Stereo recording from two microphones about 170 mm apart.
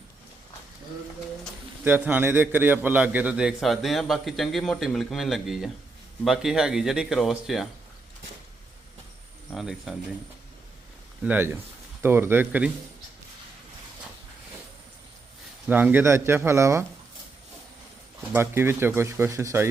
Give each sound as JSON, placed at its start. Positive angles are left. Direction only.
{"t": 1.8, "sound": "a man's voice", "side_deg": -10}
{"t": 9.5, "sound": "a man's voice", "side_deg": 0}
{"t": 11.2, "sound": "speech", "side_deg": -10}
{"t": 15.6, "sound": "speech", "side_deg": -10}
{"t": 18.3, "sound": "speech", "side_deg": -15}